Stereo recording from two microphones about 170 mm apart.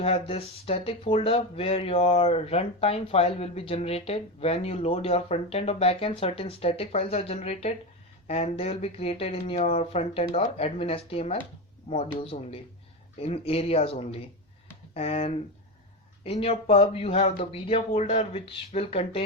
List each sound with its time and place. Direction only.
0.0 s speech: 35° left (ahead or behind)